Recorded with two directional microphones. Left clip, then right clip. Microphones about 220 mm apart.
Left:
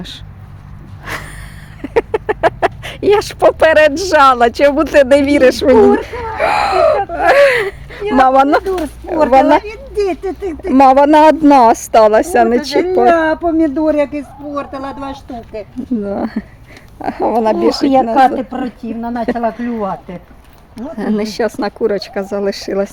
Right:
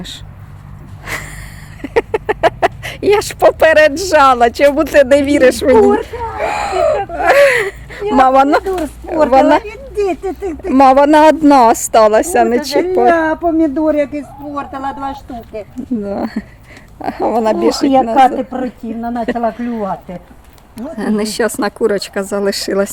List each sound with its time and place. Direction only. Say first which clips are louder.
1.0 s snort: right 1 dB; 15° left (ahead or behind)
1.8 s speech: even; 10° left (ahead or behind)
13.1 s speech: left 1 dB; centre (ahead or behind)
20.7 s speech: even; 5° left (ahead or behind)